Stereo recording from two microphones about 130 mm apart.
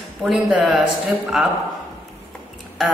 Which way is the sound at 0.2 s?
5° right (ahead or behind).